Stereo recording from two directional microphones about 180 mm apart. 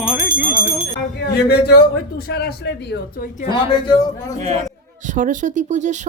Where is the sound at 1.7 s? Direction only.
60° left (ahead or behind).